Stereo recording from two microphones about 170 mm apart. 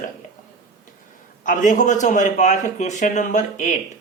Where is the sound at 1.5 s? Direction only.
50° left (ahead or behind).